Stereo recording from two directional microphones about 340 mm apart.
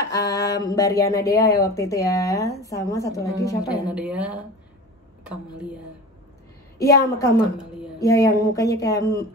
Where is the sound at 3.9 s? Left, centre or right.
Centre.